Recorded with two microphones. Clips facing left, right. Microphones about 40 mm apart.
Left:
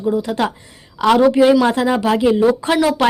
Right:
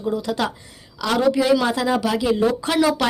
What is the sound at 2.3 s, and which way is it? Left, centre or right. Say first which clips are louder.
Speech: left 5 dB; centre.